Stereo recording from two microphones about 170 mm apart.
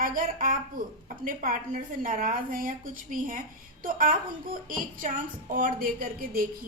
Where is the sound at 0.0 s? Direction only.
55° right (ahead or behind).